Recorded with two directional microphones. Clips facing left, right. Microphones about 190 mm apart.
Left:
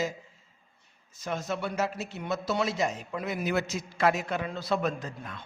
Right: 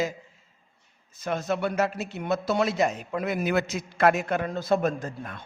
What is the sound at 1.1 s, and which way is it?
A man's voice, 60° right (ahead or behind).